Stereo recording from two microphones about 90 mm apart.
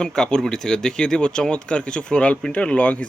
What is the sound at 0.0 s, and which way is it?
Speech, 10° left (ahead or behind).